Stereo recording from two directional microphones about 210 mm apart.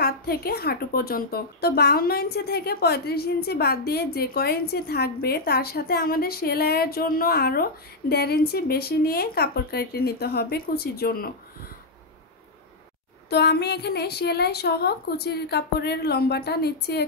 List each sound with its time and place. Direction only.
0.0 s a woman's voice: 45° left (ahead or behind)
13.3 s a woman's voice: 50° left (ahead or behind)